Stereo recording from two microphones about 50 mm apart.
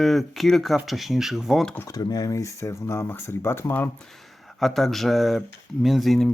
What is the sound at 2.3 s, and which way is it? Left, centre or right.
Speech, left.